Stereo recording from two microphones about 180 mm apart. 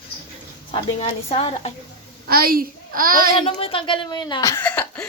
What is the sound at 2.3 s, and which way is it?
A child's voice, 55° right (ahead or behind).